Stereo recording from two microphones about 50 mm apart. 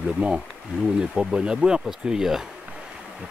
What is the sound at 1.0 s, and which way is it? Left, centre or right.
Speech, centre.